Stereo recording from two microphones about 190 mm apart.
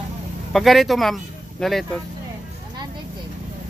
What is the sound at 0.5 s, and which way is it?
Speech, centre (ahead or behind).